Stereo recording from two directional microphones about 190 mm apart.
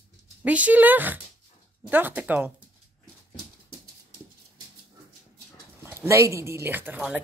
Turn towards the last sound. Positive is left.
turn(degrees=-5)  # may be behind; listen again after turning